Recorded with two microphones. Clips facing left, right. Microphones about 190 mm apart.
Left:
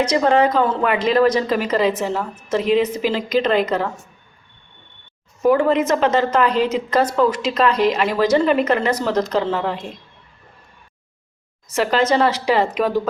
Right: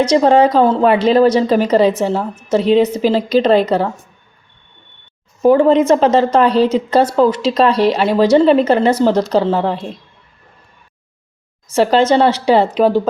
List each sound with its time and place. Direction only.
0.1 s a woman's voice: 30° right (ahead or behind)
5.4 s a woman's voice: 30° right (ahead or behind)
11.7 s speech: 30° right (ahead or behind)